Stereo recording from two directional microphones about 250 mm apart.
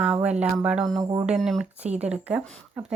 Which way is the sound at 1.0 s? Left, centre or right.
Centre.